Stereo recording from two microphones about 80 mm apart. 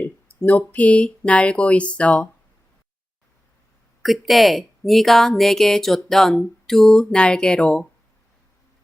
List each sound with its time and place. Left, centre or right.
0.0 s speech: centre
4.0 s speech: centre